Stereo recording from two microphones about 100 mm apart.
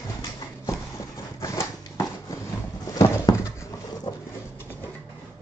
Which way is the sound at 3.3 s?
40° left (ahead or behind).